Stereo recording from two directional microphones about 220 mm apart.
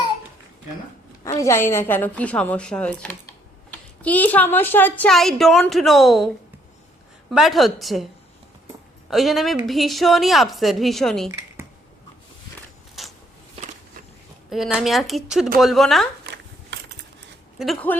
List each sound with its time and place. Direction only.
1.4 s a woman's voice: 10° left (ahead or behind)
9.0 s a woman's voice: centre (ahead or behind)
14.5 s a woman's voice: centre (ahead or behind)
16.2 s a sound: 50° right (ahead or behind)
17.6 s a woman's voice: 5° left (ahead or behind)